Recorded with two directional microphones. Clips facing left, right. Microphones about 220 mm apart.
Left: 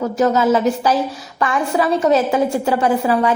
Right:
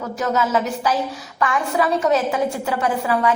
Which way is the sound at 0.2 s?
35° left (ahead or behind).